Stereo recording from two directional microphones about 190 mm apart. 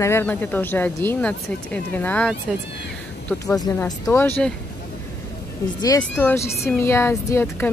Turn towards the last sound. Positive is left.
turn(degrees=10)  # may be behind; listen again after turning